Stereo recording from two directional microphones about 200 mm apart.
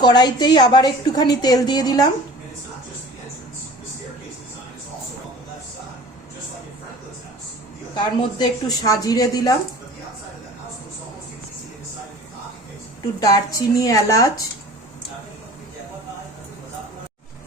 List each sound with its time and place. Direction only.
0.0 s a woman's voice: 20° left (ahead or behind)
7.9 s a woman's voice: 20° left (ahead or behind)
13.1 s speech: 20° left (ahead or behind)